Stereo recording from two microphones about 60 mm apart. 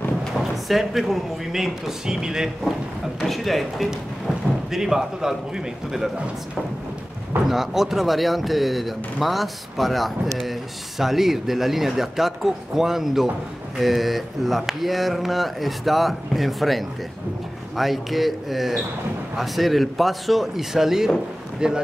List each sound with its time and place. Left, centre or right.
0.4 s speech: centre
7.4 s speech: centre